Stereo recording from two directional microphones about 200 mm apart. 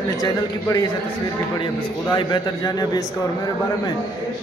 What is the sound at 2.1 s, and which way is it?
A man's voice, 20° left (ahead or behind).